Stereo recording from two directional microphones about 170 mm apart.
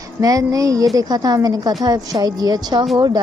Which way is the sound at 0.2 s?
20° right (ahead or behind).